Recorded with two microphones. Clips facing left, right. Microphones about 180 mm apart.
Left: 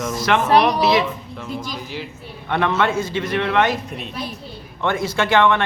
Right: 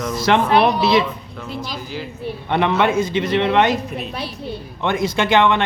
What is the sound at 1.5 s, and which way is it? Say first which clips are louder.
Speech: even; 45° left (ahead or behind).